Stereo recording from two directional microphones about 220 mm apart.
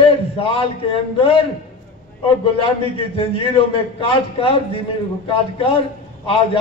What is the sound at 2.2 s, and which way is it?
A man's voice, 25° left (ahead or behind).